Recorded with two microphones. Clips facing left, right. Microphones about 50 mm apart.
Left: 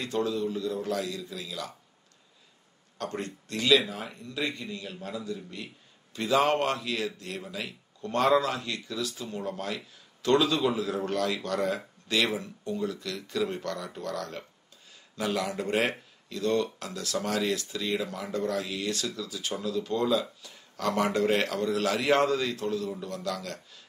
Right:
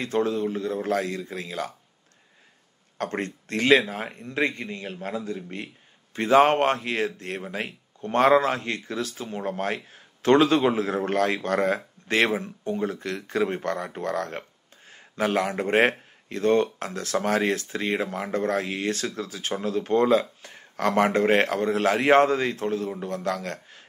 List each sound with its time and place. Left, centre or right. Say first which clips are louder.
0.0 s speech: right 4 dB; right
3.0 s speech: right 5 dB; right